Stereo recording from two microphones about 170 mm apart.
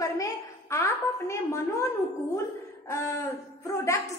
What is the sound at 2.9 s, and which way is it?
A woman's voice, 15° left (ahead or behind).